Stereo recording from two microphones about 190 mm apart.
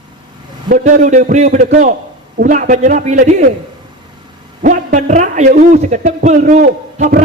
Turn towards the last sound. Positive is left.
turn(degrees=-50)  # may be behind; listen again after turning